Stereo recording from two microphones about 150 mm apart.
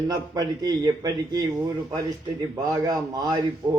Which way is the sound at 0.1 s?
25° right (ahead or behind).